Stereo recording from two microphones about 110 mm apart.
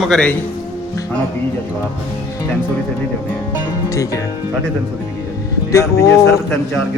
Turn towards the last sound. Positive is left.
turn(degrees=30)  # may be behind; listen again after turning